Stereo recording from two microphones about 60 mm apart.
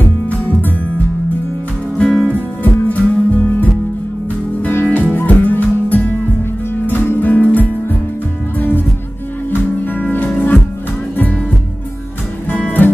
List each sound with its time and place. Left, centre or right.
0.3 s music: left
4.6 s music: left
12.5 s music: left